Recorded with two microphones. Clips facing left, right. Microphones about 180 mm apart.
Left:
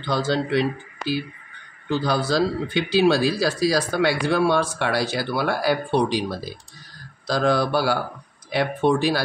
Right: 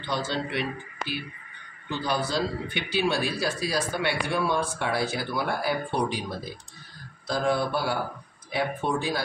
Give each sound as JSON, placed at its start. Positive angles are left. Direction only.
{"t": 0.0, "sound": "speech", "side_deg": 90}